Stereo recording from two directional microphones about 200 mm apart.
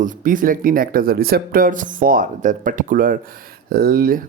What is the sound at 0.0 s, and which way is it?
Speech, 45° right (ahead or behind).